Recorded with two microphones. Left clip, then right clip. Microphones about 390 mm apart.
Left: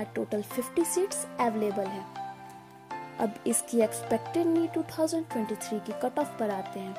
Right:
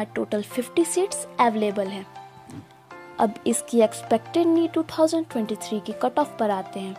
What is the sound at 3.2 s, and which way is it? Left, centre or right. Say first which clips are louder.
Speech: right 8 dB; left.